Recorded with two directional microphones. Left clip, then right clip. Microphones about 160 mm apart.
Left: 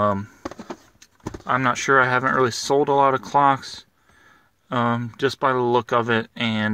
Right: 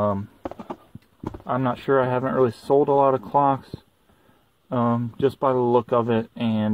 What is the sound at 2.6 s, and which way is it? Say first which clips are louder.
Speech: even; 30° left (ahead or behind).